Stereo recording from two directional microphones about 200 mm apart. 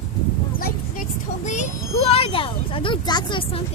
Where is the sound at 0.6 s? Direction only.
45° left (ahead or behind).